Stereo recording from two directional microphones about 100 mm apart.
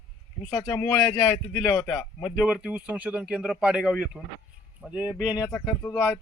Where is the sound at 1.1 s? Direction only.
35° left (ahead or behind).